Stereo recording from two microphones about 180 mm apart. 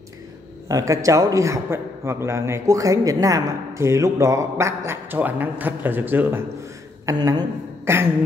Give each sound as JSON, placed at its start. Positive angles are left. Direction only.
{"t": 0.7, "sound": "a man's voice", "side_deg": -20}
{"t": 7.1, "sound": "a woman's voice", "side_deg": -20}